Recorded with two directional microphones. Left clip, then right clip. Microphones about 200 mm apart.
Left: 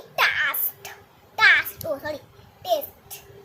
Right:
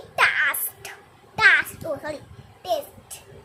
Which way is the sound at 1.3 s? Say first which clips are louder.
Even; 10° right (ahead or behind).